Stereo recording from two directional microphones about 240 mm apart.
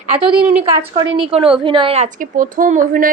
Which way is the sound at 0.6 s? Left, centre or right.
Centre.